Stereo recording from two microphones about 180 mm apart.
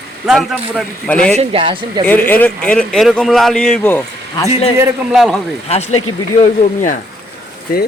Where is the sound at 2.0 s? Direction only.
10° left (ahead or behind).